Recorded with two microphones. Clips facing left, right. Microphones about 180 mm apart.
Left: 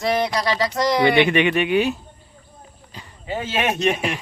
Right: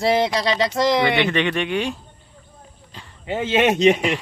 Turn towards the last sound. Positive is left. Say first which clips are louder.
# right 5 dB
turn(degrees=-20)  # may be behind; listen again after turning